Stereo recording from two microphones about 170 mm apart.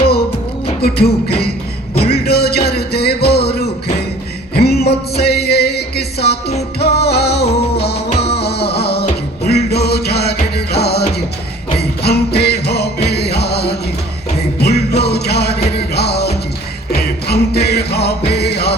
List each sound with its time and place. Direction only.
0.8 s music: 65° left (ahead or behind)